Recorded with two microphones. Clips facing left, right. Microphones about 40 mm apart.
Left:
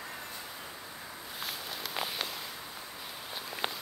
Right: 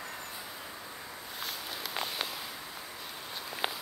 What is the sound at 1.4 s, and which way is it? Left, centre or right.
Walk, centre.